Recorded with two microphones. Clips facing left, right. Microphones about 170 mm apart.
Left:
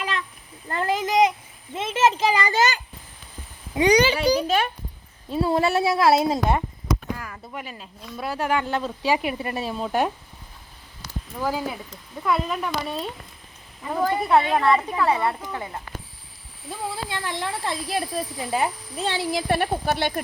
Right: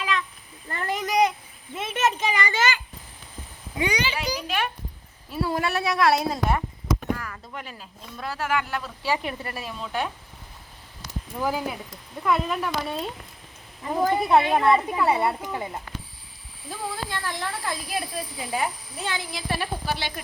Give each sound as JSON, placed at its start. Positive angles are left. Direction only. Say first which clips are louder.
{"t": 0.9, "sound": "a sound", "louder": "left 2 dB", "side_deg": 25}
{"t": 3.8, "sound": "a child's voice", "louder": "left 10 dB", "side_deg": 40}
{"t": 4.4, "sound": "speech", "louder": "left 5 dB", "side_deg": 45}
{"t": 5.3, "sound": "speech", "louder": "left 5 dB", "side_deg": 25}
{"t": 7.2, "sound": "a sound", "louder": "left 1 dB", "side_deg": 20}
{"t": 7.6, "sound": "speech", "louder": "left 3 dB", "side_deg": 5}
{"t": 8.3, "sound": "speech", "louder": "left 3 dB", "side_deg": 20}
{"t": 9.0, "sound": "speech", "louder": "left 3 dB", "side_deg": 15}
{"t": 9.6, "sound": "a child's voice", "louder": "left 6 dB", "side_deg": 40}
{"t": 11.4, "sound": "speech", "louder": "left 1 dB", "side_deg": -5}
{"t": 13.9, "sound": "speech", "louder": "even", "side_deg": -10}
{"t": 16.6, "sound": "speech", "louder": "left 1 dB", "side_deg": 25}
{"t": 19.3, "sound": "speech", "louder": "left 7 dB", "side_deg": 50}